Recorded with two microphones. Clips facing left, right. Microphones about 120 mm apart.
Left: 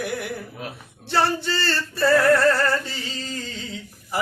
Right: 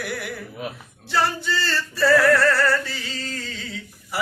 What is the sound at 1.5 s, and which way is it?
Male singing, 60° left (ahead or behind).